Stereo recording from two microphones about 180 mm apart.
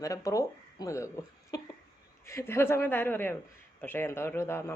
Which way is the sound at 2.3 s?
15° left (ahead or behind).